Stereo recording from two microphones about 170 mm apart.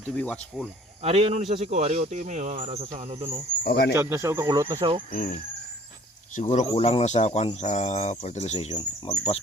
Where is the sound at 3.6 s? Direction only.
70° left (ahead or behind).